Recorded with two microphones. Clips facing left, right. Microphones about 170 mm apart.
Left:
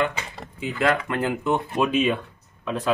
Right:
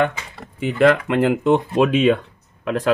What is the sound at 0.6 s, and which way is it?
Speech, 75° right (ahead or behind).